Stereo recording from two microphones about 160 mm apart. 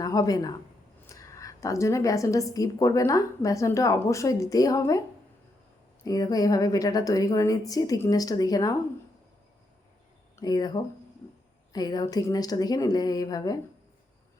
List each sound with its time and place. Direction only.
0.0 s a woman's voice: 20° left (ahead or behind)
6.1 s a woman's voice: 25° left (ahead or behind)
10.4 s a woman's voice: 25° left (ahead or behind)